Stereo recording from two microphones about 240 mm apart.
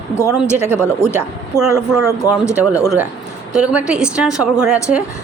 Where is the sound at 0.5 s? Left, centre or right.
Centre.